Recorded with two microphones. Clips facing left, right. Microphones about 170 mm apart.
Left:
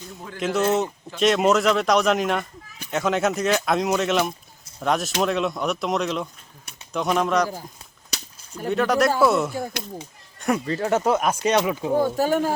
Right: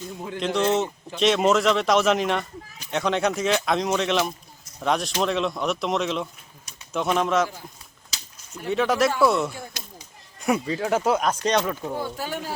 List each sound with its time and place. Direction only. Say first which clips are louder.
0.3 s a man's voice: left 1 dB; 5° left (ahead or behind)
8.7 s a man's voice: left 1 dB; centre (ahead or behind)
11.4 s speech: left 3 dB; 10° left (ahead or behind)
11.9 s speech: left 10 dB; 45° left (ahead or behind)